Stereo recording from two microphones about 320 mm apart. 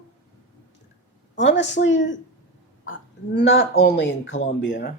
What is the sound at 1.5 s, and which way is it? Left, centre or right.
Speech, left.